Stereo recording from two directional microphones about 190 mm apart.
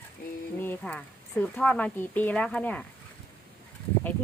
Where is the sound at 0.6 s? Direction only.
10° left (ahead or behind).